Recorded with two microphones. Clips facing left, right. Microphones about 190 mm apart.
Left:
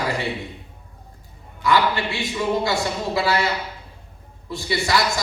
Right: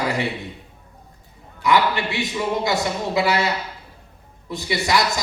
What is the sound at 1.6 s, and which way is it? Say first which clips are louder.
A man's voice: right 1 dB; 20° right (ahead or behind).